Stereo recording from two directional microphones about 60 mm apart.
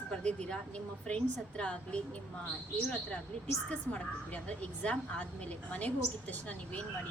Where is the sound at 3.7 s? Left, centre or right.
Left.